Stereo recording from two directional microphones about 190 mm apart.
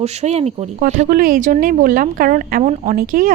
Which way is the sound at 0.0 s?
35° right (ahead or behind).